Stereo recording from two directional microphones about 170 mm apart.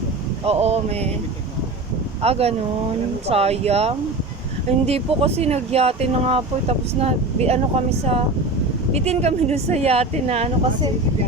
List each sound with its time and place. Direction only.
0.4 s speech: 40° right (ahead or behind)
2.2 s speech: 35° right (ahead or behind)